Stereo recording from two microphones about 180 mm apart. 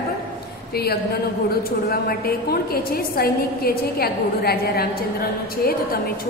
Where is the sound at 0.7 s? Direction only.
60° left (ahead or behind).